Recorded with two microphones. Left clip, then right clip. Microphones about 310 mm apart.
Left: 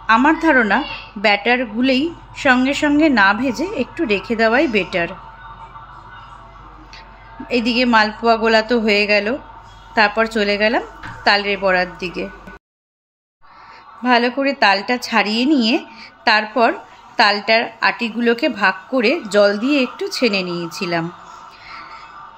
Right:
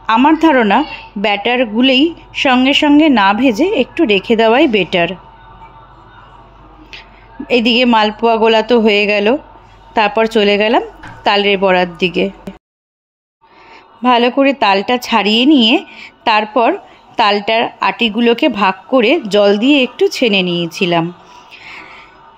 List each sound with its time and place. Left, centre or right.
0.0 s speech: right
7.4 s speech: right
14.0 s speech: right
21.6 s music: right